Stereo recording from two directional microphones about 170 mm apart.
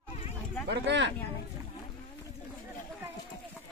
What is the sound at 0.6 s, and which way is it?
Speech, 90° right.